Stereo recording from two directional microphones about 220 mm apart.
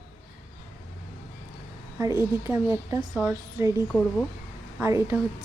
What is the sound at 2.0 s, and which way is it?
A woman's voice, 15° right (ahead or behind).